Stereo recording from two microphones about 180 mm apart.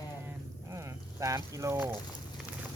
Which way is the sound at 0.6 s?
15° right (ahead or behind).